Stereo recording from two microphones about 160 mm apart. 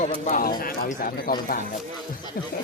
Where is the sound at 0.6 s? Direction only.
65° left (ahead or behind).